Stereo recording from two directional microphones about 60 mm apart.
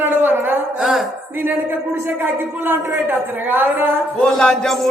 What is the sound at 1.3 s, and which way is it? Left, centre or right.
A man's voice, right.